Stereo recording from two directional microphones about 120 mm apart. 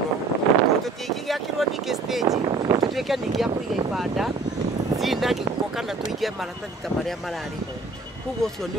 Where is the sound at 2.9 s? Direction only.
Centre (ahead or behind).